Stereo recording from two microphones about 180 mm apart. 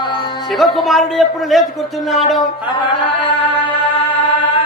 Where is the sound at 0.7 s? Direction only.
Centre (ahead or behind).